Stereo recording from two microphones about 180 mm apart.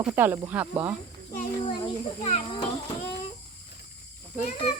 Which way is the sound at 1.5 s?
20° left (ahead or behind).